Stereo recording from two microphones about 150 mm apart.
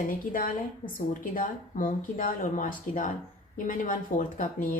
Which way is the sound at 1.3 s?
65° left (ahead or behind).